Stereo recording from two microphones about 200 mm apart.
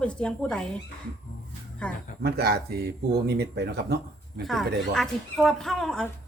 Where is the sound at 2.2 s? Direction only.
50° right (ahead or behind).